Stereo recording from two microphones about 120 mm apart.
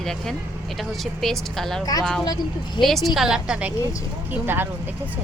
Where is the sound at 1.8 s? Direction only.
30° left (ahead or behind).